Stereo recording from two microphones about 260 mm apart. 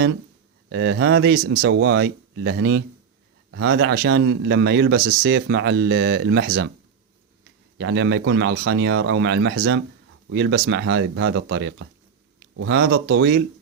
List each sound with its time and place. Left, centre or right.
0.7 s speech: right